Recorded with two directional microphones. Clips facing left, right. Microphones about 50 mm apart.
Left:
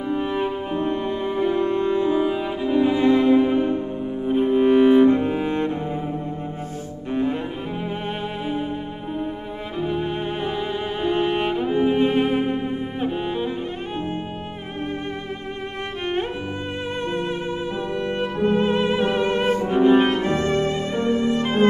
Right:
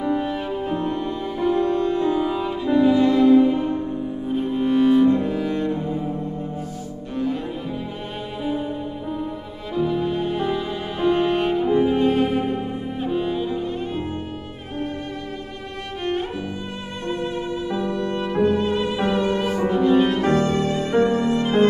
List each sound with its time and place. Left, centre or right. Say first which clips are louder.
0.2 s music: left 1 dB; left
4.3 s cello: left 5 dB; left
10.4 s music: right 1 dB; left
17.0 s music: right 2 dB; left
20.9 s violin: right 10 dB; right